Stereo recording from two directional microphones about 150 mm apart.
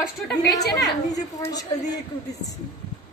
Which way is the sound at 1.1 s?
25° left (ahead or behind).